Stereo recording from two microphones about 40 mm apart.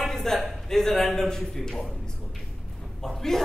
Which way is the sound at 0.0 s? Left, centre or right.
Centre.